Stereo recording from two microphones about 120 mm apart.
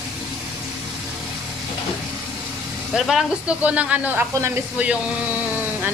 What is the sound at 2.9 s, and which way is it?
Speech, 5° right (ahead or behind).